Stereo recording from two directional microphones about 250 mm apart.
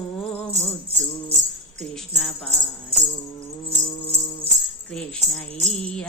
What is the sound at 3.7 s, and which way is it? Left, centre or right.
Music, right.